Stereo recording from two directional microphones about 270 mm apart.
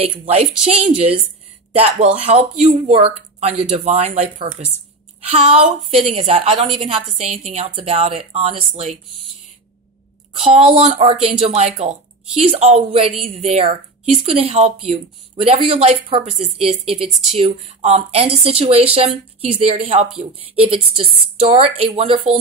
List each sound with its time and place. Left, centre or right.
0.0 s a woman's voice: right
10.6 s a woman's voice: right